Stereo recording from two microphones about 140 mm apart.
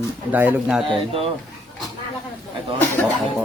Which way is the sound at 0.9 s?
40° right (ahead or behind).